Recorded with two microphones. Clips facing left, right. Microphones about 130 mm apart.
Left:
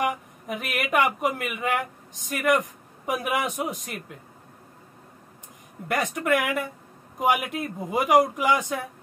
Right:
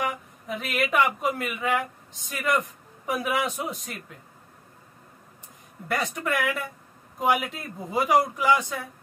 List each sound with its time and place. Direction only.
0.0 s a man's voice: 15° left (ahead or behind)
5.9 s a man's voice: 15° left (ahead or behind)